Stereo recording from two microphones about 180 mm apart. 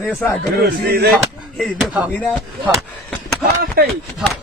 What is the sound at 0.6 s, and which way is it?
Speech, 60° right (ahead or behind).